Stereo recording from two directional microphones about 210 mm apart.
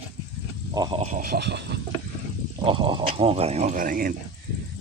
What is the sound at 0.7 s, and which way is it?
Speech, 20° right (ahead or behind).